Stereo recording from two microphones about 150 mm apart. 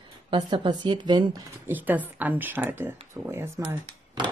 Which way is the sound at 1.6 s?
10° right (ahead or behind).